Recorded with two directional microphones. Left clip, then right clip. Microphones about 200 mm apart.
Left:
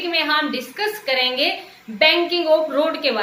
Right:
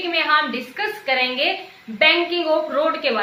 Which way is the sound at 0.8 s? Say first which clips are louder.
Even; 20° left (ahead or behind).